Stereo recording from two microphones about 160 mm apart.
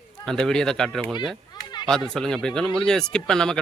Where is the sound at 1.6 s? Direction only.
25° left (ahead or behind).